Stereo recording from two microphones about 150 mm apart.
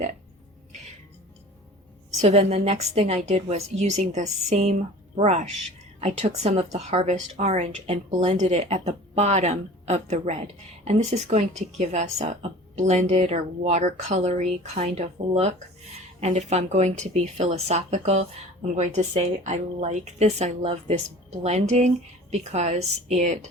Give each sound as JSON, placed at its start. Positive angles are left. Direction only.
{"t": 2.2, "sound": "speech", "side_deg": -45}